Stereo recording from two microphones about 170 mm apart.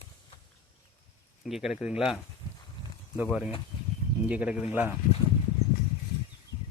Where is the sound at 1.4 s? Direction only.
Centre (ahead or behind).